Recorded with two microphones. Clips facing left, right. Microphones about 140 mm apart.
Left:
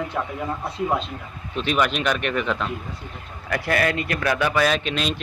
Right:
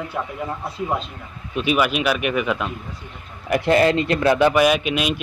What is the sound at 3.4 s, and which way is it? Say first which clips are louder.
A man's voice: right 6 dB; 20° right (ahead or behind).